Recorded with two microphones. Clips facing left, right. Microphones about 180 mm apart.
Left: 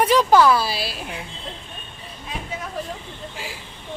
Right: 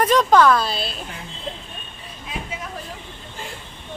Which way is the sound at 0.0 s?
10° left (ahead or behind).